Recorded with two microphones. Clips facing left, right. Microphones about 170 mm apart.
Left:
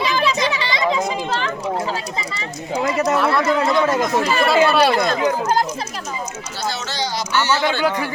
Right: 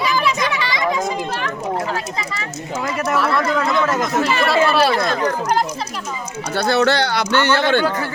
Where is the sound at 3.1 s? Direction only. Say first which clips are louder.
Right 3 dB; centre (ahead or behind).